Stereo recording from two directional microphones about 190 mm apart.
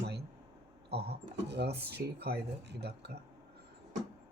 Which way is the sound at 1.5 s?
60° right (ahead or behind).